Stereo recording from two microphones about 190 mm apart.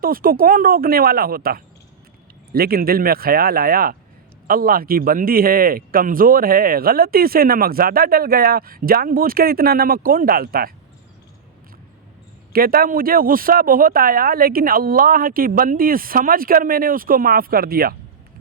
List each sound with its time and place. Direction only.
0.0 s speech: 50° right (ahead or behind)
12.5 s speech: 50° right (ahead or behind)